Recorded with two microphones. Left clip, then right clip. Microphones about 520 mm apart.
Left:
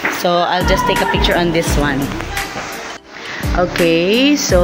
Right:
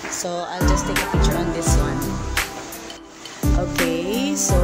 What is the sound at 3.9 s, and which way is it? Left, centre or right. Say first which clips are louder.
Speech: left 10 dB; right.